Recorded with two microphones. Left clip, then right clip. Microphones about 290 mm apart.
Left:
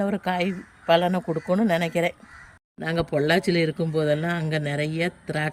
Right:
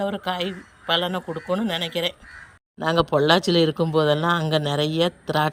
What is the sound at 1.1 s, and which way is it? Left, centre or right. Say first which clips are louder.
Speech: left 1 dB; centre.